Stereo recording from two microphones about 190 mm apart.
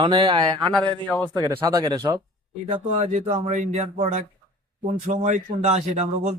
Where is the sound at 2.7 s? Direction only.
30° right (ahead or behind).